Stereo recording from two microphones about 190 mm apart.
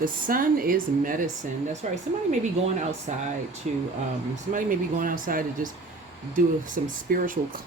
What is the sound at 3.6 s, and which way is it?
Speech, 45° right (ahead or behind).